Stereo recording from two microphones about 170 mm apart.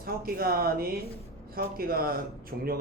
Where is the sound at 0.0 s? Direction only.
60° right (ahead or behind).